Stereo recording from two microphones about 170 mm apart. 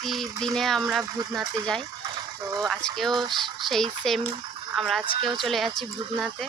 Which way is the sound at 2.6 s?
Centre (ahead or behind).